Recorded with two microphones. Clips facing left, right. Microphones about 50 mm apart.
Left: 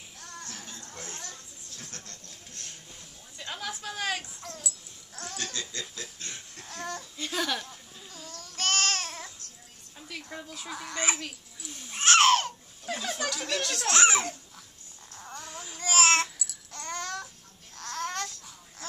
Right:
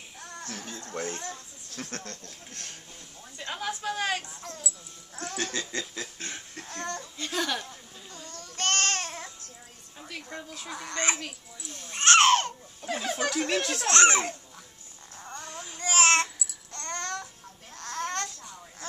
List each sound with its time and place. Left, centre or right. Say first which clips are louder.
0.2 s music: right 2 dB; centre
0.7 s chatter: right 9 dB; right
1.8 s speech: right 9 dB; right
3.3 s a child's voice: right 3 dB; centre
5.2 s laughter: right 4 dB; right
6.7 s speech: right 1 dB; centre
8.1 s baby cry: right 1 dB; centre
9.9 s a sound: right 1 dB; centre
10.3 s speech: even; centre; by 13.8 s right
13.8 s speech: right 2 dB; centre
15.1 s babbling: right 1 dB; centre